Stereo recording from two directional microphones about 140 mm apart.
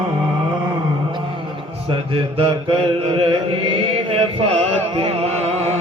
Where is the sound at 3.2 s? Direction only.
35° right (ahead or behind).